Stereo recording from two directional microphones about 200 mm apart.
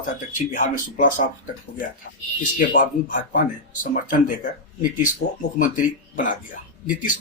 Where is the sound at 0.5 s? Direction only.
40° left (ahead or behind).